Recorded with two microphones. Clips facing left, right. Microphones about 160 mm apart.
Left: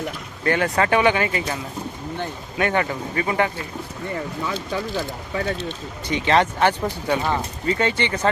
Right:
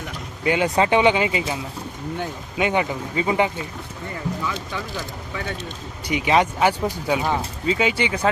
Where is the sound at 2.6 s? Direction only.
15° right (ahead or behind).